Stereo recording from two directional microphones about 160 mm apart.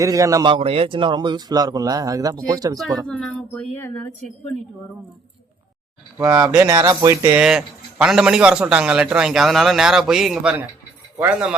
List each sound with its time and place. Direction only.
0.0 s speech: 20° right (ahead or behind)
0.5 s speech: 35° right (ahead or behind)
3.1 s speech: 5° left (ahead or behind)
6.1 s speech: 15° right (ahead or behind)
7.3 s a man's voice: 5° right (ahead or behind)